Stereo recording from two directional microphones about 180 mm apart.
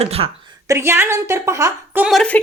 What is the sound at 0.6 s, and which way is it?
A woman's voice, 15° right (ahead or behind).